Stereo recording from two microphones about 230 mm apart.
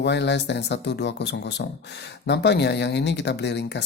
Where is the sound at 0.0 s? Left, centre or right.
Left.